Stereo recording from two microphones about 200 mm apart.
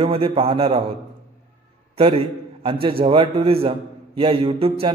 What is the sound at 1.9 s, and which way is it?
A man's voice, 25° right (ahead or behind).